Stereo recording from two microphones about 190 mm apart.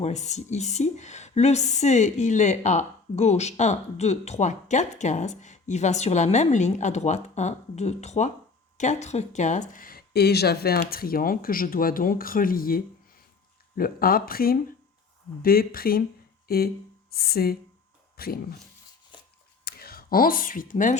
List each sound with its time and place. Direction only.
0.0 s a woman's voice: 35° left (ahead or behind); by 18.3 s 55° left (ahead or behind)
19.6 s speech: 55° left (ahead or behind)